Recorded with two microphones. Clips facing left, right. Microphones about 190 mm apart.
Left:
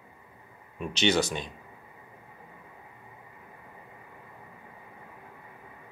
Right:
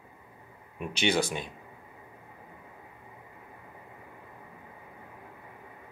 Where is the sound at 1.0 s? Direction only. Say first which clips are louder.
Left 2 dB; 10° right (ahead or behind).